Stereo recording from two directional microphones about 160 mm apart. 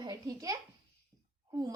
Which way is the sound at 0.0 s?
25° right (ahead or behind).